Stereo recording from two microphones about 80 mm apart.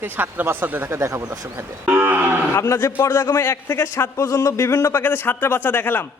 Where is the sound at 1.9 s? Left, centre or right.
Right.